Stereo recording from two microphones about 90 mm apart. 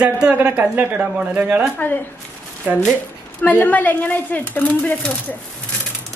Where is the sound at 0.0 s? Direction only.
10° right (ahead or behind).